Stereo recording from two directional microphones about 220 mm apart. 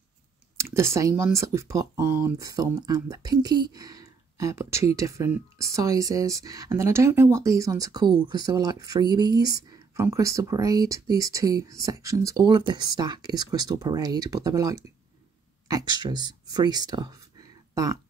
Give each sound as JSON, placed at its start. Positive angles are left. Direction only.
{"t": 0.6, "sound": "speech", "side_deg": -10}